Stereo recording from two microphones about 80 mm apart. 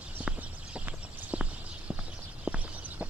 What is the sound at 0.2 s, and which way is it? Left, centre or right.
Clip-clop, centre.